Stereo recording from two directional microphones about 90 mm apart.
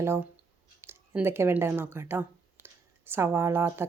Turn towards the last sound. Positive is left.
turn(degrees=-25)  # may be behind; listen again after turning